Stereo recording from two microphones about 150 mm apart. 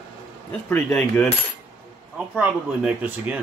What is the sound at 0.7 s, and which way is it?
Speech, 10° left (ahead or behind).